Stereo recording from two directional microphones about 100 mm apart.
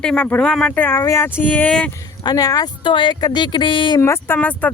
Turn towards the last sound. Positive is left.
turn(degrees=15)  # may be behind; listen again after turning